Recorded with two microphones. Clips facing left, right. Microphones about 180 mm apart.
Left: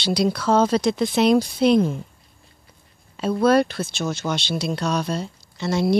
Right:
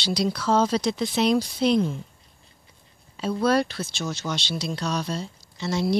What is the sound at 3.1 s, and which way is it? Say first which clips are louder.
Speech: left 5 dB; 60° left (ahead or behind).